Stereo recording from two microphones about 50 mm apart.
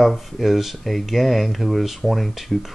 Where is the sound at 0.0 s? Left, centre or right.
Centre.